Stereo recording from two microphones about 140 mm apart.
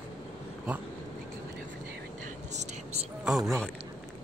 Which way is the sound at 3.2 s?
Centre (ahead or behind).